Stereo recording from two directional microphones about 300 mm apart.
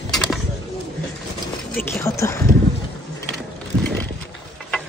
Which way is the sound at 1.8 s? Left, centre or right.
Centre.